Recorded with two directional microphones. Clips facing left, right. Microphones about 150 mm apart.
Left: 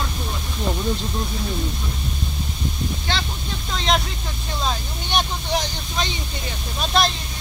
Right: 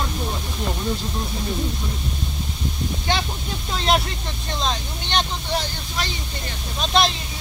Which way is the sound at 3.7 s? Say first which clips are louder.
Right 1 dB; 5° right (ahead or behind).